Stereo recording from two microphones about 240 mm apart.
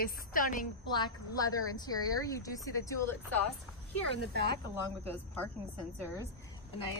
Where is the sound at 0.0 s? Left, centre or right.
Left.